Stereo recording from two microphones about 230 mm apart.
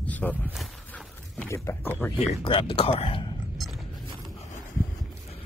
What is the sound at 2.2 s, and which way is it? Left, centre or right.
Speech, left.